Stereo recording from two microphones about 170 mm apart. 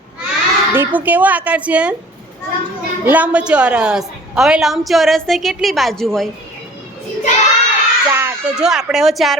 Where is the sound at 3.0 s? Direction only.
10° right (ahead or behind).